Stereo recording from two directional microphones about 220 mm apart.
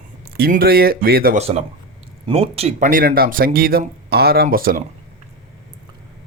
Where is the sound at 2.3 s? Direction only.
25° right (ahead or behind).